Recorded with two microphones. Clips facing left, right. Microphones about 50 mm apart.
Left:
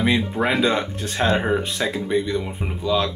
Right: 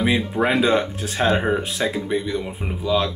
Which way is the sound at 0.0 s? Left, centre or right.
Centre.